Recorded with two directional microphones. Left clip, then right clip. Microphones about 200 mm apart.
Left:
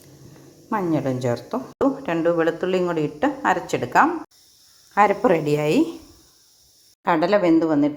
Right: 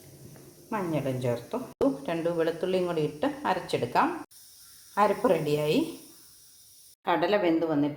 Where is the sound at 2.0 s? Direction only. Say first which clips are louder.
Left 8 dB; 20° left (ahead or behind).